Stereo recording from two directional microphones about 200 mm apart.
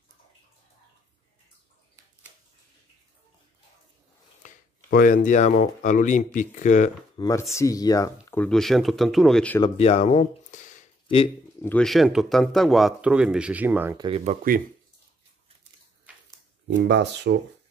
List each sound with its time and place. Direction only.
4.4 s speech: 45° left (ahead or behind)
7.2 s speech: 15° left (ahead or behind)
8.3 s speech: 5° left (ahead or behind)
9.6 s speech: 30° left (ahead or behind)
11.6 s speech: 5° left (ahead or behind)
13.9 s speech: 25° right (ahead or behind)
16.1 s a sound: 5° right (ahead or behind)
16.7 s speech: 60° right (ahead or behind)